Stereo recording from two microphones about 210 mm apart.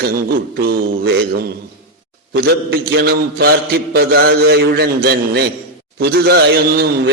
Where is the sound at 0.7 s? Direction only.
50° right (ahead or behind).